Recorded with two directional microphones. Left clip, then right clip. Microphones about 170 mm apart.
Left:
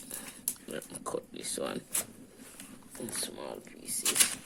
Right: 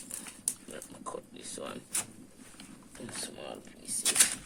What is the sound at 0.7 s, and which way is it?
Speech, 65° left (ahead or behind).